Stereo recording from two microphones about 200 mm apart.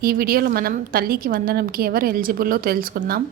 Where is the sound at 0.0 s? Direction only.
45° right (ahead or behind).